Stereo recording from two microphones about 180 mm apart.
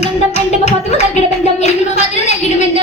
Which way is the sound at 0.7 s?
40° left (ahead or behind).